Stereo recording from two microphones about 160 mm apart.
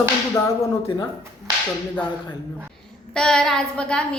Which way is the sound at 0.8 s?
25° left (ahead or behind).